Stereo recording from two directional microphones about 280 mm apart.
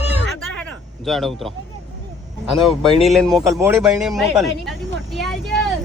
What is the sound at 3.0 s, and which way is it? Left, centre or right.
Speech, centre.